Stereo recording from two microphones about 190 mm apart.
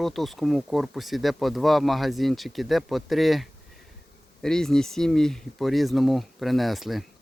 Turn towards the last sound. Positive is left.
turn(degrees=0)  # may be behind; listen again after turning